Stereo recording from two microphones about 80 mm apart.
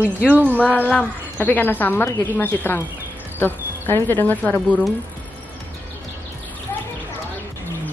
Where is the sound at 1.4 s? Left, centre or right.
Left.